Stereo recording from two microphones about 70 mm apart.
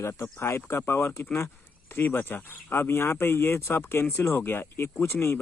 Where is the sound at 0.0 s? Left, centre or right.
Left.